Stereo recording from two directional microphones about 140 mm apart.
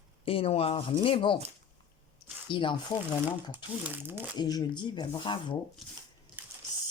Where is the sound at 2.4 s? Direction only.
35° left (ahead or behind).